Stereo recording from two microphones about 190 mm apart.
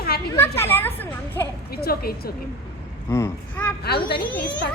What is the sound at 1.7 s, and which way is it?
Speech, 55° left (ahead or behind).